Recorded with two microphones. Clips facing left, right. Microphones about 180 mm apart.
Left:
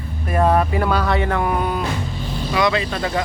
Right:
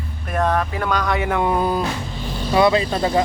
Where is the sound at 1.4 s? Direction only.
30° right (ahead or behind).